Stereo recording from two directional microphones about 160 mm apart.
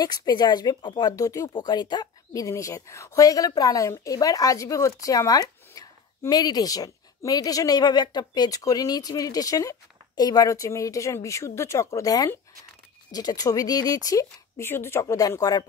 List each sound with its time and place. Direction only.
0.0 s speech: 25° left (ahead or behind)